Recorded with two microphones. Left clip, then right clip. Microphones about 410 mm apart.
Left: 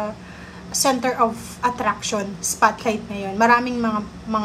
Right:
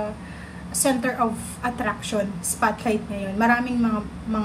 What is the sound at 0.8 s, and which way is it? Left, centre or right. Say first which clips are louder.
A woman's voice: left 4 dB; centre.